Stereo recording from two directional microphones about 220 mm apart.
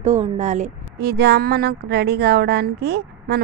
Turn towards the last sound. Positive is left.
turn(degrees=-45)  # may be behind; listen again after turning